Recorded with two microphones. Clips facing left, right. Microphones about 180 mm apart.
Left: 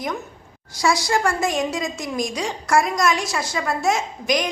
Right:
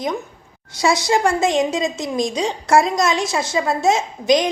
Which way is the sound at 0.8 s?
20° right (ahead or behind).